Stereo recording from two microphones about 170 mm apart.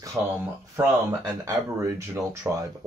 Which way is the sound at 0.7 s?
15° right (ahead or behind).